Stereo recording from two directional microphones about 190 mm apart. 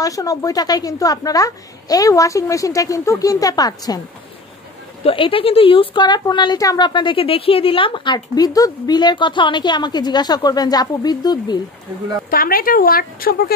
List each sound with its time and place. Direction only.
0.0 s a woman's voice: 20° left (ahead or behind)
5.0 s a woman's voice: 30° left (ahead or behind)
12.3 s speech: 50° left (ahead or behind)